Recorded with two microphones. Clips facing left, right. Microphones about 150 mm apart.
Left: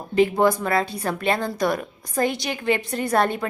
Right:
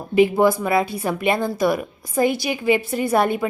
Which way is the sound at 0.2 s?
10° right (ahead or behind).